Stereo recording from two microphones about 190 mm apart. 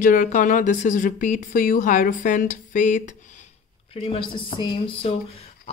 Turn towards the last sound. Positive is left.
turn(degrees=25)  # may be behind; listen again after turning